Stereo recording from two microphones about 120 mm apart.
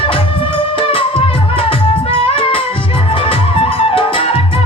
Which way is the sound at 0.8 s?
50° left (ahead or behind).